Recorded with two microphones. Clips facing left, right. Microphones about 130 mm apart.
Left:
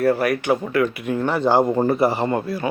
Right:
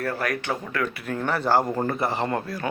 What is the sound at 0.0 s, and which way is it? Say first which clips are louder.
Speech: left 8 dB; 10° left (ahead or behind).